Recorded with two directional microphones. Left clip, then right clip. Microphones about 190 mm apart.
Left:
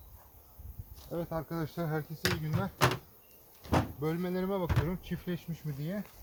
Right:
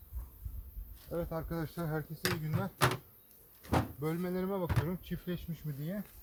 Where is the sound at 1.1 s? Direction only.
30° right (ahead or behind); by 6.1 s 5° right (ahead or behind).